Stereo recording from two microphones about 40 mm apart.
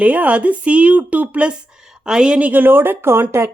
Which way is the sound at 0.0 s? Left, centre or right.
Right.